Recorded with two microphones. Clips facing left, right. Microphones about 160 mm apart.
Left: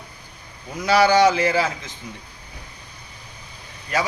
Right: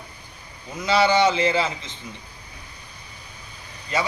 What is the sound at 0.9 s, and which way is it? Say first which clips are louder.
A man's voice: left 3 dB; 20° right (ahead or behind).